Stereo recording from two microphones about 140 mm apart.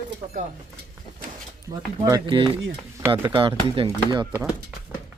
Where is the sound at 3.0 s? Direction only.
15° right (ahead or behind).